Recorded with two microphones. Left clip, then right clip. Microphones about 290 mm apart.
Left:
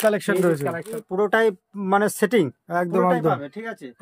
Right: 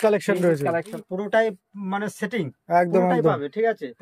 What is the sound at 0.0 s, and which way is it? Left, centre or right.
Speech, centre.